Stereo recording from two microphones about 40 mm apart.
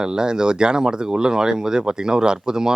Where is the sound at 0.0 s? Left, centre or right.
Centre.